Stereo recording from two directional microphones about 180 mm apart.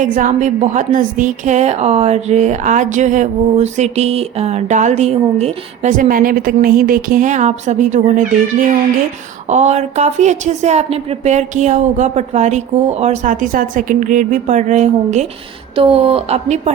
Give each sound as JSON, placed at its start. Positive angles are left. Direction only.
{"t": 0.0, "sound": "a woman's voice", "side_deg": -45}
{"t": 9.5, "sound": "a woman's voice", "side_deg": -40}